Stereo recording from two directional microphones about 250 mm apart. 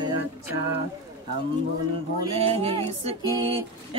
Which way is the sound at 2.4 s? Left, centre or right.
Right.